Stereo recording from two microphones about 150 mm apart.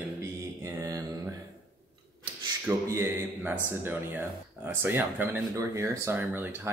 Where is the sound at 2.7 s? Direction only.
15° right (ahead or behind).